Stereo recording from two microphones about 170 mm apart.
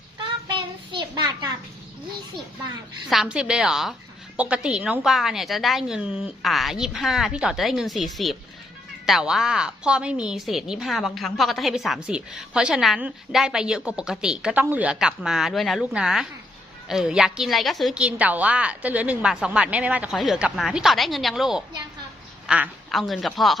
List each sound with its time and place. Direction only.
0.4 s child singing: 25° right (ahead or behind)
3.1 s a woman's voice: 5° right (ahead or behind)